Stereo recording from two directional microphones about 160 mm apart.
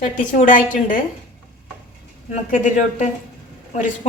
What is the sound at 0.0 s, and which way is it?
Speech, 55° left (ahead or behind).